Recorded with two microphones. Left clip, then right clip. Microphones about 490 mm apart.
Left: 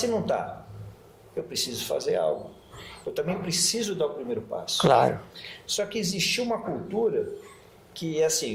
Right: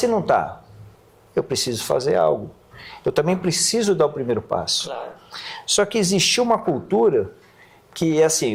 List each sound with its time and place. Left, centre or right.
0.0 s speech: right
1.5 s speech: right